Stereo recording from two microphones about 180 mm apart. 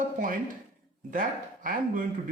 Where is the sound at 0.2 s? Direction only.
45° right (ahead or behind).